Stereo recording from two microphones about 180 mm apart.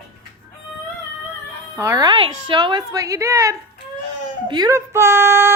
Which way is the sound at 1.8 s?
20° right (ahead or behind).